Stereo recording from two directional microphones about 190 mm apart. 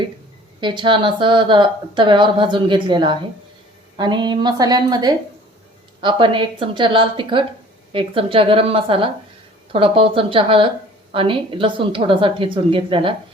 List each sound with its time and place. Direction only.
0.6 s a woman's voice: 25° right (ahead or behind)